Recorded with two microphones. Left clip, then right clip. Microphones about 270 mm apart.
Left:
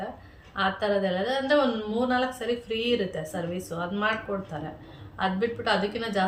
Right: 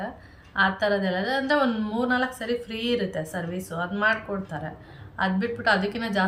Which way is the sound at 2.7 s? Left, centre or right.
Centre.